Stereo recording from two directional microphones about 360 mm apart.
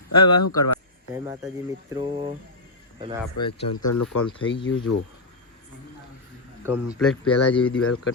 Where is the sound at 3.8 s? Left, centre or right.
Left.